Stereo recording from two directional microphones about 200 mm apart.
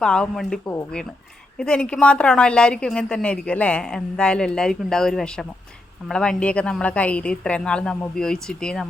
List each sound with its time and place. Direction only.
0.0 s a woman's voice: 5° left (ahead or behind)